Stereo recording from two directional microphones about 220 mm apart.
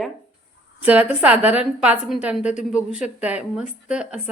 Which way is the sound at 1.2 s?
5° right (ahead or behind).